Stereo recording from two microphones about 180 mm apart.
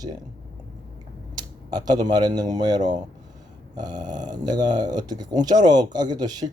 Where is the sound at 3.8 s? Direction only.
20° right (ahead or behind).